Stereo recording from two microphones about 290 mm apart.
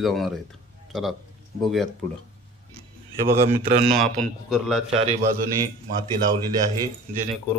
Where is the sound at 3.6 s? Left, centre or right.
Right.